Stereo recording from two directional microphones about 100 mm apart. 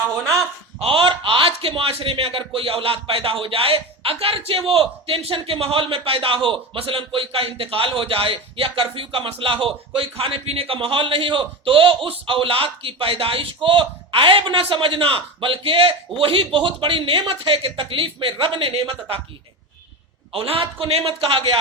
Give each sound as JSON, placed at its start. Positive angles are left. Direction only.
{"t": 0.8, "sound": "a man's voice", "side_deg": -65}
{"t": 20.3, "sound": "a man's voice", "side_deg": -70}